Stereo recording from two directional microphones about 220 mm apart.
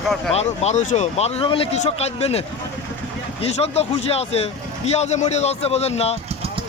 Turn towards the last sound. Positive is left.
turn(degrees=30)  # may be behind; listen again after turning